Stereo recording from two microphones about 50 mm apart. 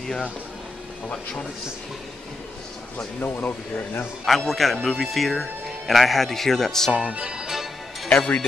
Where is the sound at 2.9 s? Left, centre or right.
Left.